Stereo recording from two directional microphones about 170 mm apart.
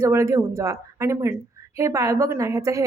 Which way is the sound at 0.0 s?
15° right (ahead or behind).